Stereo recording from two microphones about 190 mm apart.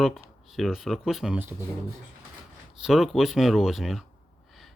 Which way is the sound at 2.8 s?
Centre (ahead or behind).